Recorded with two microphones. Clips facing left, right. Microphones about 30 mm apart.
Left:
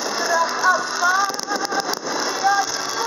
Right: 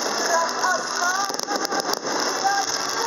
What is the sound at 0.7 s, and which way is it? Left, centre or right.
Music, left.